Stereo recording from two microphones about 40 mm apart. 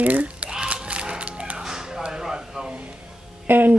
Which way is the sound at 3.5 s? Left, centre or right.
Right.